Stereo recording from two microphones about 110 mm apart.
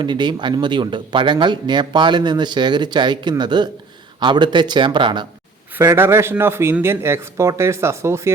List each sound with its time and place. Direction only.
0.0 s speech: 45° right (ahead or behind)
5.7 s speech: 25° right (ahead or behind)